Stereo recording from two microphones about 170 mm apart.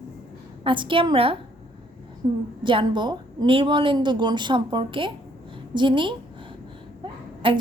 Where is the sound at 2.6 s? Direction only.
30° right (ahead or behind).